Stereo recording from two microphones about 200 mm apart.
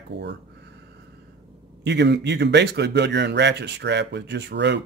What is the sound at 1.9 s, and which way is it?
Speech, 60° right (ahead or behind).